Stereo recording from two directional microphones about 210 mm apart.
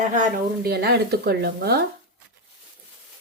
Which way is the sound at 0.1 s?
40° right (ahead or behind).